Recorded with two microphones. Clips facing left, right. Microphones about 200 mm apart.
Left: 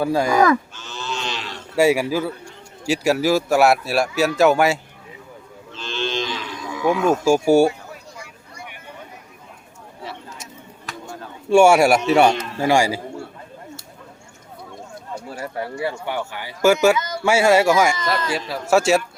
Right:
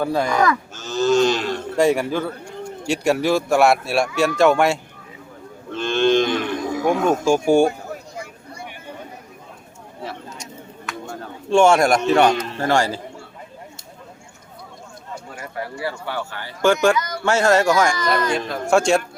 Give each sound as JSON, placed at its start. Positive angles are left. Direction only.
{"t": 0.0, "sound": "a man's voice", "side_deg": 10}
{"t": 0.8, "sound": "a sound", "side_deg": -40}
{"t": 1.7, "sound": "a man's voice", "side_deg": 5}
{"t": 5.7, "sound": "cattle", "side_deg": -55}
{"t": 6.7, "sound": "a sound", "side_deg": -45}
{"t": 7.3, "sound": "a man's voice", "side_deg": 5}
{"t": 11.5, "sound": "a man's voice", "side_deg": 10}
{"t": 15.3, "sound": "a man's voice", "side_deg": 30}